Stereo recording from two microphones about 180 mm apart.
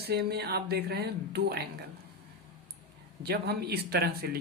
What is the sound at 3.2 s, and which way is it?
Speech, 65° right (ahead or behind).